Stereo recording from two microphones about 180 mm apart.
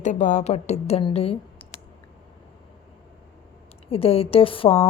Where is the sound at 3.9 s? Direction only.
30° left (ahead or behind).